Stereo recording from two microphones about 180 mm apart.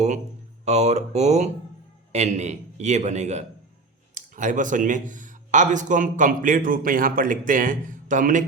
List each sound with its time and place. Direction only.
0.6 s a man's voice: 40° right (ahead or behind)